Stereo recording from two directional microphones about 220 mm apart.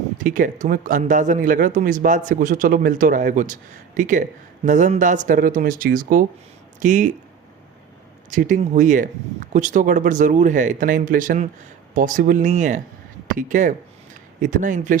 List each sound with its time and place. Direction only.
0.2 s speech: 35° right (ahead or behind)
8.3 s speech: 35° right (ahead or behind)